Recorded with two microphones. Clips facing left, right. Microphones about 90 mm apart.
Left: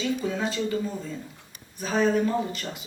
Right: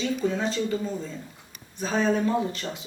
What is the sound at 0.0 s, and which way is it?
Speech, 5° left (ahead or behind).